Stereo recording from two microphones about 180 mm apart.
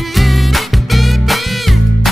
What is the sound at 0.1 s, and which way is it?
Music, centre (ahead or behind).